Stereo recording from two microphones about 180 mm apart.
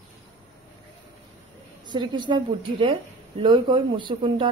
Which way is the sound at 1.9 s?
25° right (ahead or behind).